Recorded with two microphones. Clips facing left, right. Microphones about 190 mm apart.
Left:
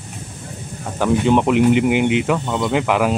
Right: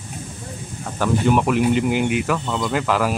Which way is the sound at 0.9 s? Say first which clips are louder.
Left 3 dB; 20° left (ahead or behind).